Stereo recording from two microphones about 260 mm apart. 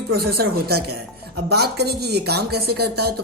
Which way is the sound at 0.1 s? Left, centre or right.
Right.